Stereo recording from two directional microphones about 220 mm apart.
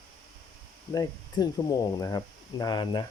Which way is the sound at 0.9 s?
15° left (ahead or behind).